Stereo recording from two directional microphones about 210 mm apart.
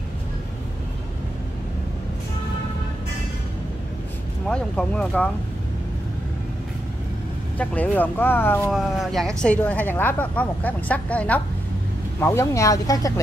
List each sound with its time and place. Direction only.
4.5 s speech: 5° left (ahead or behind)
7.5 s a woman's voice: 5° left (ahead or behind)